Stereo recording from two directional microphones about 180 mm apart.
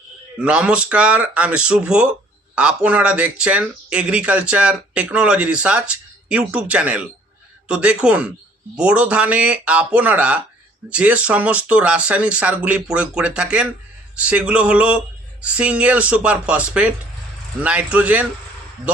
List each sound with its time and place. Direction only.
0.3 s speech: 5° right (ahead or behind)